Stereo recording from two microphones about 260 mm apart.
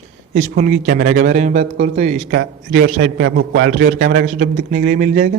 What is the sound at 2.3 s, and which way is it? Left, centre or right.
A man's voice, right.